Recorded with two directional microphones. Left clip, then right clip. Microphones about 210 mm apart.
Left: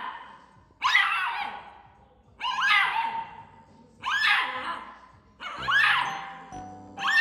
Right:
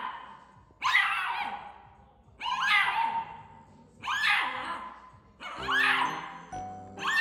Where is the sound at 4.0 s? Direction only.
Centre (ahead or behind).